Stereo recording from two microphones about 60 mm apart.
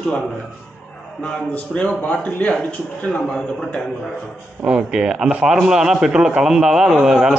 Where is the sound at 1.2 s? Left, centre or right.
Centre.